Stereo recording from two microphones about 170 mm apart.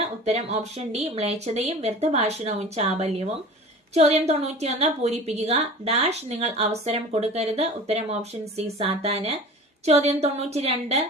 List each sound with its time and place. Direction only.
0.3 s a woman's voice: 40° right (ahead or behind)